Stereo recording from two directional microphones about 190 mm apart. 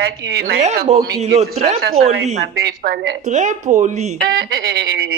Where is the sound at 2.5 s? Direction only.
55° right (ahead or behind).